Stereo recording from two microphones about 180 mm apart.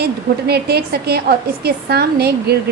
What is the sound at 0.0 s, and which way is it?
A woman's voice, 65° right (ahead or behind).